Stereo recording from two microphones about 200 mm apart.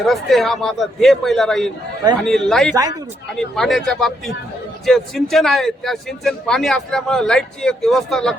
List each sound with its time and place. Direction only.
0.0 s speech: centre (ahead or behind)
2.7 s speech: 20° right (ahead or behind)
3.3 s speech: centre (ahead or behind)